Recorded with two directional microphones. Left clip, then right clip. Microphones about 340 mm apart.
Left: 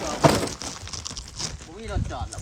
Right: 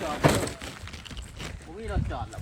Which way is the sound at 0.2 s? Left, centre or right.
Centre.